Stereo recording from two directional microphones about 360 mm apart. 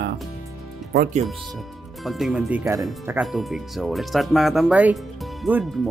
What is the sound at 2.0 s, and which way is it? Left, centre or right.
Speech, centre.